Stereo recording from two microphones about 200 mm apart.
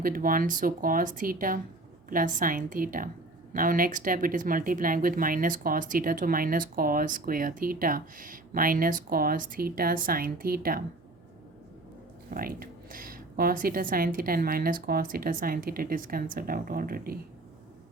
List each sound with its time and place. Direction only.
0.0 s speech: 45° right (ahead or behind)
12.3 s speech: 45° right (ahead or behind)